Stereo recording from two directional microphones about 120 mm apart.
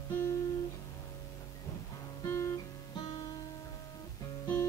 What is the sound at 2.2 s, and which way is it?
Guitar, 20° left (ahead or behind).